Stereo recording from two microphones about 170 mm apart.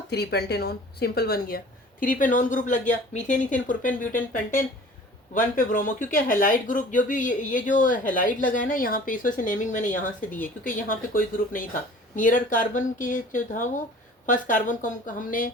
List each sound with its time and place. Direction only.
0.1 s speech: 70° left (ahead or behind); by 3.4 s 45° left (ahead or behind)
5.3 s speech: 55° left (ahead or behind)